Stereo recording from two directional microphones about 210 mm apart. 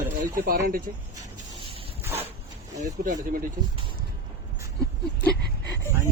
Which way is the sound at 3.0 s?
40° right (ahead or behind).